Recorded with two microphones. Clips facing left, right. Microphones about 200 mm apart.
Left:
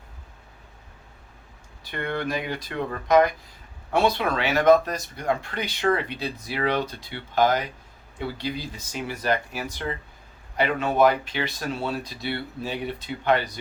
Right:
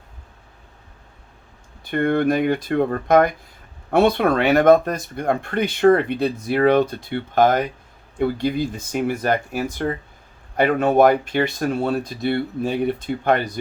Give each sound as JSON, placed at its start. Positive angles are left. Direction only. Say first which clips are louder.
{"t": 1.8, "sound": "speech", "louder": "right 10 dB", "side_deg": -50}